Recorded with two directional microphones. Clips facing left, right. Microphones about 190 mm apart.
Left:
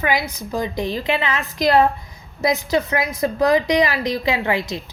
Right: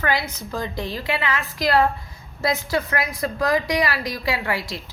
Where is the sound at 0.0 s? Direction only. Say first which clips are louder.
Left 2 dB; 15° left (ahead or behind).